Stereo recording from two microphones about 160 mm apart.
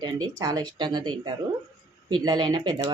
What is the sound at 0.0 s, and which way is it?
Speech, 25° right (ahead or behind).